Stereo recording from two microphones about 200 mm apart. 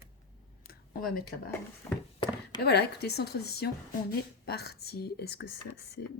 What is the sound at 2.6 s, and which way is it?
A woman's voice, 55° left (ahead or behind).